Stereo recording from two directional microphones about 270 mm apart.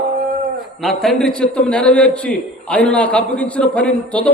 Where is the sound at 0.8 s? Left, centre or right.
Centre.